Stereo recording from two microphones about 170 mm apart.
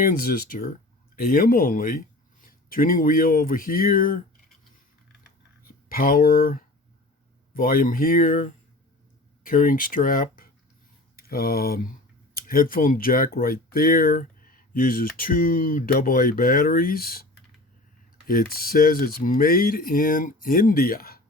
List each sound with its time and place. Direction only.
0.0 s speech: 55° left (ahead or behind)
5.2 s computer keyboard: 60° left (ahead or behind)
7.5 s speech: 55° left (ahead or behind)
18.3 s speech: 60° left (ahead or behind)